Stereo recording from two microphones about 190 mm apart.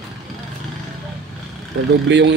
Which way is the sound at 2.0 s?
70° right (ahead or behind).